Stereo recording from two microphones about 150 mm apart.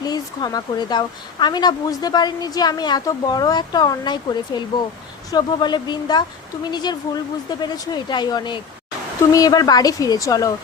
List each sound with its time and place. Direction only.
0.0 s speech: 25° left (ahead or behind)